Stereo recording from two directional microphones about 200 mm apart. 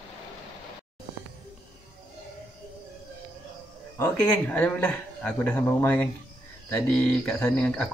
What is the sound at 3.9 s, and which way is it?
A man's voice, 5° left (ahead or behind).